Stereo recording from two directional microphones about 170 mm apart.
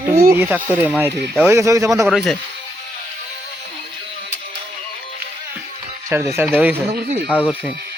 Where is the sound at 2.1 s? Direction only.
Centre (ahead or behind).